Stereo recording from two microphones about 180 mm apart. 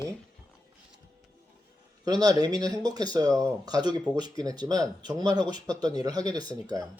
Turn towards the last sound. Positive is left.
turn(degrees=-20)  # may be behind; listen again after turning